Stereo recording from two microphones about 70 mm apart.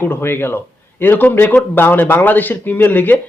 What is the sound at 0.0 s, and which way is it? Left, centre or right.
A man's voice, left.